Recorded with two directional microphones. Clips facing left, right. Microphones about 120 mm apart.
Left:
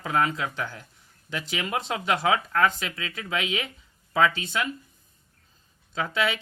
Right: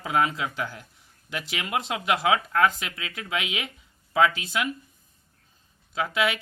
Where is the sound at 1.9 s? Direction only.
35° left (ahead or behind).